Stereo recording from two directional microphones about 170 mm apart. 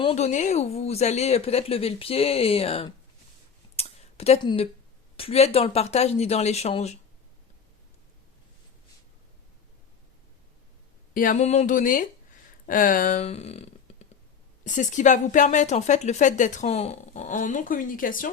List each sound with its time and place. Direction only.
0.0 s speech: 40° left (ahead or behind)
3.8 s a sound: 40° left (ahead or behind)
5.1 s speech: 35° left (ahead or behind)
11.1 s speech: 55° left (ahead or behind)